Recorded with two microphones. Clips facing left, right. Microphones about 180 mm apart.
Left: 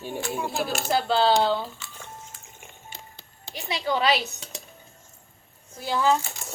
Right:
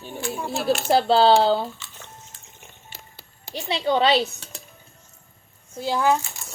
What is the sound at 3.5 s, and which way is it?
Speech, 25° right (ahead or behind).